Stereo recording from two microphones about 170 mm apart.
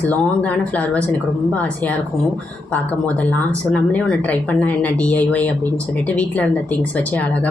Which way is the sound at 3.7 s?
5° left (ahead or behind).